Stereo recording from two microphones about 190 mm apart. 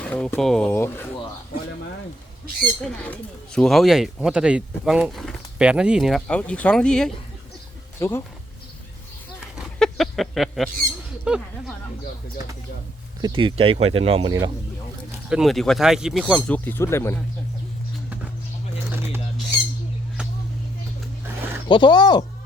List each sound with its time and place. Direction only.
0.0 s speech: 5° left (ahead or behind)
2.8 s speech: 5° left (ahead or behind)
7.9 s speech: 15° left (ahead or behind)
9.6 s a sound: centre (ahead or behind)
11.3 s speech: 5° right (ahead or behind)
13.2 s speech: 25° right (ahead or behind)
15.3 s speech: centre (ahead or behind)
18.9 s bird: 10° right (ahead or behind)
21.7 s speech: 25° left (ahead or behind)